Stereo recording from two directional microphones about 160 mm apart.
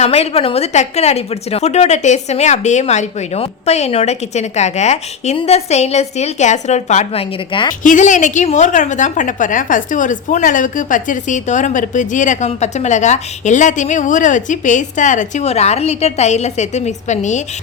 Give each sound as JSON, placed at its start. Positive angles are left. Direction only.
{"t": 0.0, "sound": "a woman's voice", "side_deg": 40}
{"t": 7.9, "sound": "a woman's voice", "side_deg": 50}